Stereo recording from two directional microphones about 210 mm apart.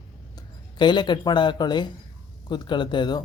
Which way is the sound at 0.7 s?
20° left (ahead or behind).